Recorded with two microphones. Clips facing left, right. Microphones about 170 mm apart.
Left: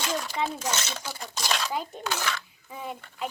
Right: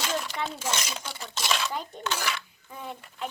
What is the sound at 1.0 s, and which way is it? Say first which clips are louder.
Speech: even; centre (ahead or behind).